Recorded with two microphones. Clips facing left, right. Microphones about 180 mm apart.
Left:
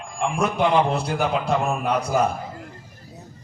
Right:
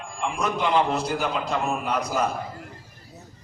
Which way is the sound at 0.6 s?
60° left (ahead or behind).